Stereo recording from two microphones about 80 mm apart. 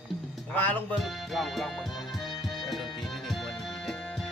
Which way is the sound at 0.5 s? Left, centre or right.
Left.